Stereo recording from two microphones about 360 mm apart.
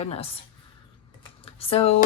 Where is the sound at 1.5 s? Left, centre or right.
Centre.